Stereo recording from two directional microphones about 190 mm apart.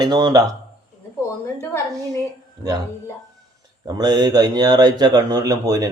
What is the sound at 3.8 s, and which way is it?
Speech, 20° right (ahead or behind).